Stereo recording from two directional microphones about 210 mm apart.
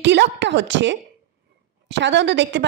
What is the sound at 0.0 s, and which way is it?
A woman's voice, 55° right (ahead or behind).